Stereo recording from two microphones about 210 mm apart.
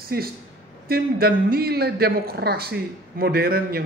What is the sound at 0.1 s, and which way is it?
A woman's voice, 45° right (ahead or behind).